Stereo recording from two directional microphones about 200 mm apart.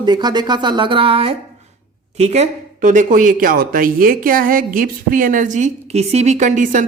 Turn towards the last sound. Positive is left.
turn(degrees=-40)  # may be behind; listen again after turning